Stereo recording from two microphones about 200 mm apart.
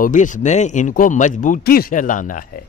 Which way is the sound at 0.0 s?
40° left (ahead or behind).